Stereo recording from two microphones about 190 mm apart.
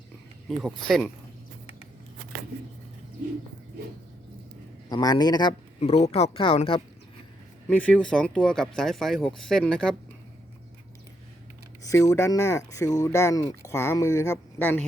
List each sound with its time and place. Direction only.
0.4 s speech: centre (ahead or behind)
4.9 s speech: 20° left (ahead or behind)
7.7 s speech: 5° left (ahead or behind)
11.8 s speech: 15° left (ahead or behind)